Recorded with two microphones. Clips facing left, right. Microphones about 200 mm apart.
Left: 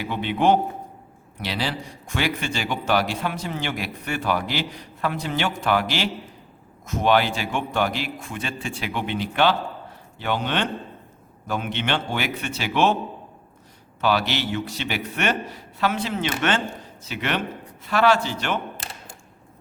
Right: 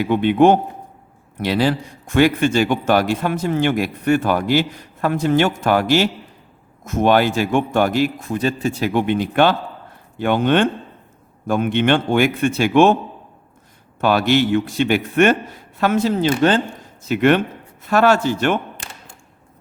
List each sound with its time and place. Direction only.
0.0 s a man's voice: 50° right (ahead or behind)
14.0 s a man's voice: 50° right (ahead or behind)
17.1 s a man's voice: 50° right (ahead or behind)